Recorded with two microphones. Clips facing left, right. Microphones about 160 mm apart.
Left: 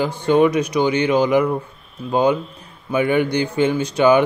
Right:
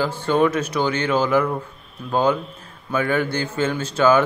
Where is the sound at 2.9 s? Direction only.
15° left (ahead or behind).